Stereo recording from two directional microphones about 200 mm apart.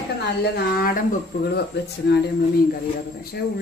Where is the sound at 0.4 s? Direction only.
50° left (ahead or behind).